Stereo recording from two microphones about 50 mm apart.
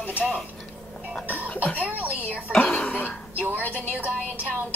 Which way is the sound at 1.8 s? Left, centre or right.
Right.